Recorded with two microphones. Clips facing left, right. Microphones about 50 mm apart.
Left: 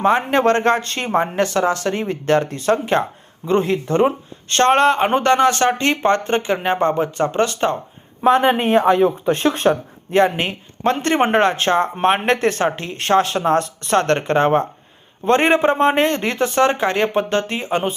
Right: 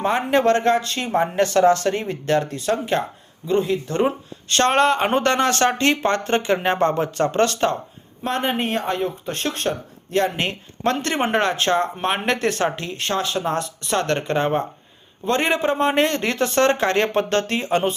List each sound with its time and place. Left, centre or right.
0.0 s speech: left
4.9 s speech: centre
13.0 s speech: left; by 17.9 s centre